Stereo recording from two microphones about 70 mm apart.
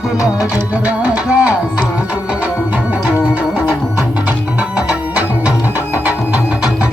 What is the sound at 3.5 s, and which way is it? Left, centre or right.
Music, centre.